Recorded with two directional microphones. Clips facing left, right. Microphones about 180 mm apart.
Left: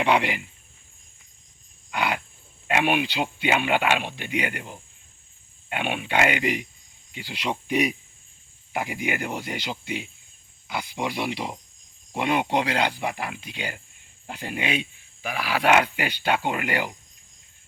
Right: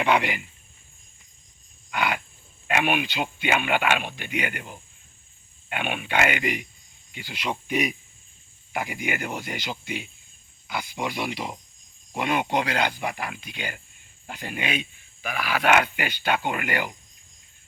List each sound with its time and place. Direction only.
0.0 s speech: 25° left (ahead or behind)
1.9 s wild animals: 25° left (ahead or behind)
2.6 s speech: 25° left (ahead or behind)
11.1 s speech: 25° left (ahead or behind)
15.3 s speech: 10° left (ahead or behind)
16.0 s speech: 30° left (ahead or behind)